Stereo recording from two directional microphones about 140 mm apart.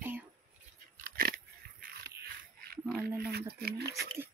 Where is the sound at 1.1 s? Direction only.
90° right.